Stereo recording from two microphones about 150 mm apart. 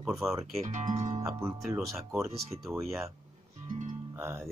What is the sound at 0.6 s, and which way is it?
Speech, 50° right (ahead or behind).